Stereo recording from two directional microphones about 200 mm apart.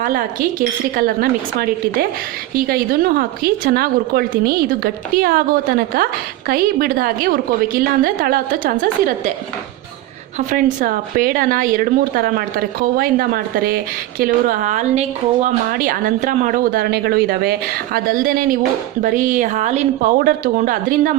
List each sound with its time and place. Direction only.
0.0 s a woman's voice: 45° right (ahead or behind)
10.3 s a woman's voice: 40° right (ahead or behind)